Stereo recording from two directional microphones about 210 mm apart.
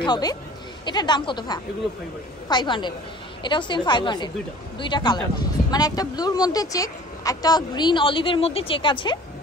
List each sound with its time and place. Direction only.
0.0 s a woman's voice: 20° left (ahead or behind)